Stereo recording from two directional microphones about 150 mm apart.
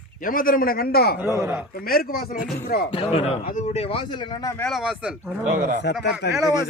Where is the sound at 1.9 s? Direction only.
80° left.